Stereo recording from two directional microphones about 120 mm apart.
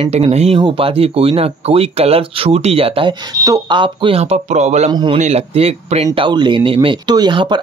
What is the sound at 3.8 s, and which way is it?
Speech, 45° right (ahead or behind).